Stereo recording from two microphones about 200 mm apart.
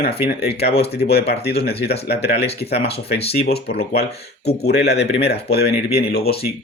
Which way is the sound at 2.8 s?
30° left (ahead or behind).